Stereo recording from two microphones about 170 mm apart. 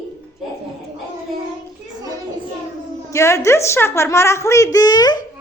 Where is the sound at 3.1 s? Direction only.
15° left (ahead or behind).